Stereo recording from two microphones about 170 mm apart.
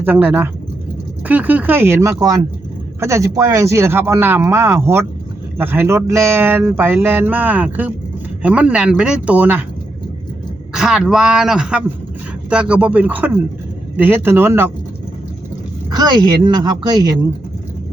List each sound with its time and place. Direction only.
0.0 s speech: 10° right (ahead or behind)
10.8 s speech: 5° right (ahead or behind)
15.9 s speech: 25° right (ahead or behind)